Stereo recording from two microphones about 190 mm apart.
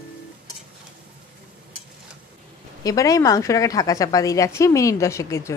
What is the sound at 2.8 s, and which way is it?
A woman's voice, 20° left (ahead or behind).